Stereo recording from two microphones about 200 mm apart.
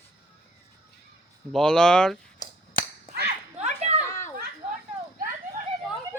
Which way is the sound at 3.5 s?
35° right (ahead or behind).